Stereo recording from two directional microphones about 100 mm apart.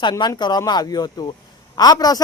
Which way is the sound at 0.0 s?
45° left (ahead or behind).